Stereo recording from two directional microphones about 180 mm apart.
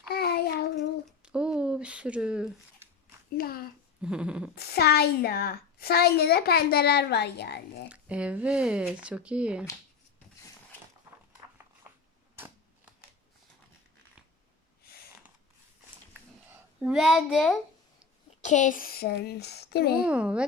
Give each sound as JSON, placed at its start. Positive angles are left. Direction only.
{"t": 0.1, "sound": "child singing", "side_deg": 60}
{"t": 1.2, "sound": "a sound", "side_deg": -5}
{"t": 3.3, "sound": "a child's voice", "side_deg": 55}
{"t": 4.0, "sound": "dog", "side_deg": -5}
{"t": 4.5, "sound": "a child's voice", "side_deg": 60}
{"t": 7.9, "sound": "speech", "side_deg": -5}
{"t": 16.5, "sound": "a woman's voice", "side_deg": 0}
{"t": 18.4, "sound": "a child's voice", "side_deg": 45}
{"t": 20.1, "sound": "speech", "side_deg": -5}